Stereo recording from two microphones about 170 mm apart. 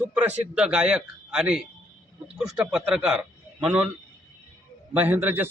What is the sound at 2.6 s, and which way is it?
Speech, 5° right (ahead or behind).